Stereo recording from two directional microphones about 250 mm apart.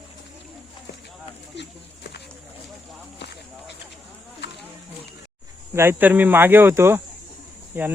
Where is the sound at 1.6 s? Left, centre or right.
Left.